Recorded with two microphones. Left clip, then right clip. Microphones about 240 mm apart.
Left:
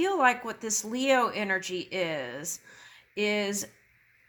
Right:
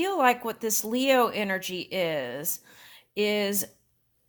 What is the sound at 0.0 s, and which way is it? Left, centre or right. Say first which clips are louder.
Speech: right 1 dB; right.